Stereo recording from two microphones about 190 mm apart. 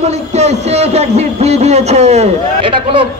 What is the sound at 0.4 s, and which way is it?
A man's voice, 35° right (ahead or behind).